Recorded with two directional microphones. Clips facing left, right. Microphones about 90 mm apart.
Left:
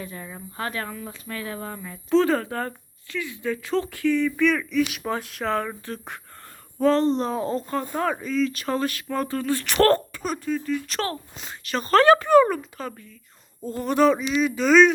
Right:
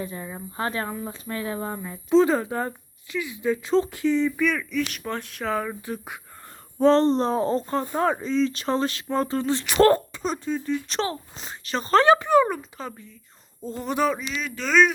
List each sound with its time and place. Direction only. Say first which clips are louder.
0.0 s speech: right 3 dB; 20° right (ahead or behind)
4.3 s speech: left 3 dB; 5° right (ahead or behind)
5.8 s speech: right 2 dB; 15° right (ahead or behind)
6.7 s speech: right 2 dB; 30° right (ahead or behind); by 14.1 s 15° right (ahead or behind)
14.2 s speech: left 8 dB; 15° left (ahead or behind)